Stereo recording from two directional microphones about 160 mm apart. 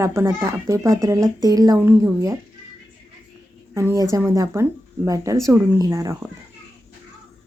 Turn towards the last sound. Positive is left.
turn(degrees=-20)  # may be behind; listen again after turning